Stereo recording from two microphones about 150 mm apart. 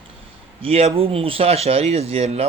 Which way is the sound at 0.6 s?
40° right (ahead or behind).